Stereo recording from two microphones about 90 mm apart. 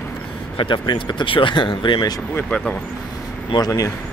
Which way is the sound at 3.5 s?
60° left (ahead or behind).